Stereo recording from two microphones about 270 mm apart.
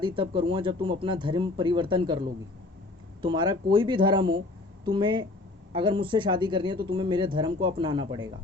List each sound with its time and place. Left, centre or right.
0.0 s speech: centre